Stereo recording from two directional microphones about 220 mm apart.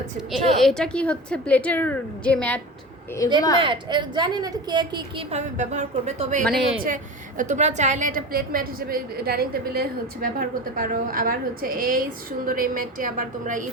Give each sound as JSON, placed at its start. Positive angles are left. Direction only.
{"t": 0.2, "sound": "a woman's voice", "side_deg": 0}
{"t": 3.6, "sound": "a woman's voice", "side_deg": -20}